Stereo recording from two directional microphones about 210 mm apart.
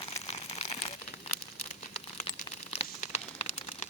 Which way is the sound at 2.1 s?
25° left (ahead or behind).